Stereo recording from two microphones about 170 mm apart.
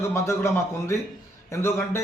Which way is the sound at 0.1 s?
15° left (ahead or behind).